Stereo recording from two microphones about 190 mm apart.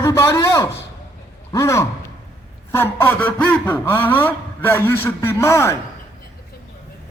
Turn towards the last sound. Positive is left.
turn(degrees=15)  # may be behind; listen again after turning